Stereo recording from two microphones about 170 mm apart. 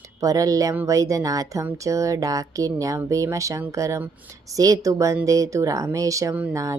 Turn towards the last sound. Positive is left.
turn(degrees=-10)  # may be behind; listen again after turning